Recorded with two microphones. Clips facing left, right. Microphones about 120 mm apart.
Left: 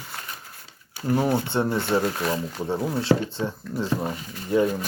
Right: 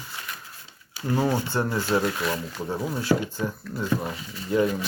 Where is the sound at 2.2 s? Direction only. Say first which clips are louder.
Left 2 dB; 40° left (ahead or behind).